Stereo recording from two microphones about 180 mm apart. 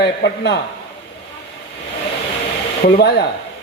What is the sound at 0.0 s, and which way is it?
Speech, 70° left (ahead or behind).